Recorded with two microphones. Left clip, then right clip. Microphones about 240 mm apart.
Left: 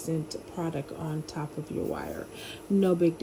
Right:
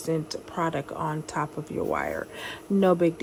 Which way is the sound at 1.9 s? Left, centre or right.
Right.